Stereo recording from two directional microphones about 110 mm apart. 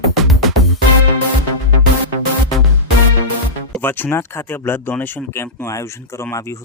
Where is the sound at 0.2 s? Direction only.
Centre (ahead or behind).